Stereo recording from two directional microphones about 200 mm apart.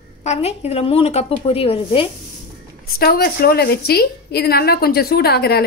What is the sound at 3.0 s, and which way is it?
Speech, 50° left (ahead or behind).